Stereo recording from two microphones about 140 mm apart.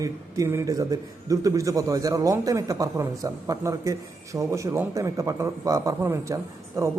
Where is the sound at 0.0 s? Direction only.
20° right (ahead or behind).